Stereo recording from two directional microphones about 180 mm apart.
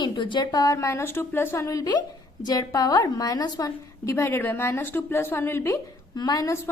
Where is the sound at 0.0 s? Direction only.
25° left (ahead or behind).